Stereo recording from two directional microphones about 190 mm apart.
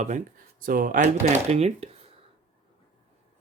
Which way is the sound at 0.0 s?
45° right (ahead or behind).